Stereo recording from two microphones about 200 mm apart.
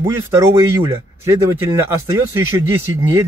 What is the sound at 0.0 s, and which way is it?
Speech, 15° right (ahead or behind).